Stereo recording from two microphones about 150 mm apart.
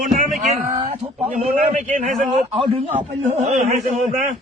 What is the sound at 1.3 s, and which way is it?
A man's voice, 50° right (ahead or behind).